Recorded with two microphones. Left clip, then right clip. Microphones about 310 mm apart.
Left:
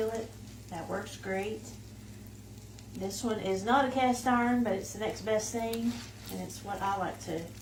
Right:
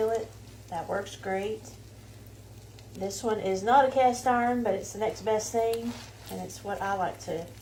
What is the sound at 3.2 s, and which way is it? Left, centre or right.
A woman's voice, centre.